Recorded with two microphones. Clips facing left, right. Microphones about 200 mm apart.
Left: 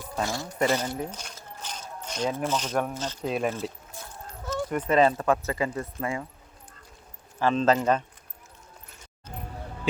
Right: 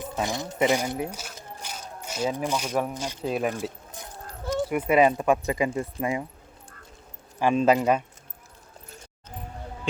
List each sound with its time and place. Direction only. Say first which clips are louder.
0.0 s speech: right 2 dB; 20° right (ahead or behind)
3.2 s speech: right 1 dB; centre (ahead or behind)
3.5 s a sound: right 1 dB; 15° right (ahead or behind)
4.4 s speech: right 3 dB; 10° right (ahead or behind)
7.3 s speech: right 2 dB; 15° right (ahead or behind)